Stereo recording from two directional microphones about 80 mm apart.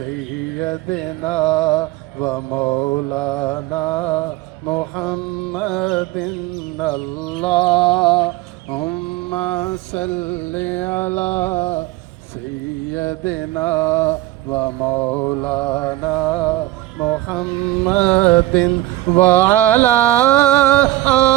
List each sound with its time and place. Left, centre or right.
0.6 s a sound: centre
2.3 s mantra: left
3.2 s a sound: centre
5.0 s music: centre
7.4 s music: centre
8.8 s mantra: centre; by 11.8 s left
12.9 s mantra: left; by 15.7 s centre
16.0 s music: centre
16.3 s a sound: centre